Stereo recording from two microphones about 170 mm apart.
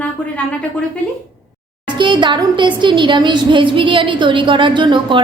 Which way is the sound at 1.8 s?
25° right (ahead or behind).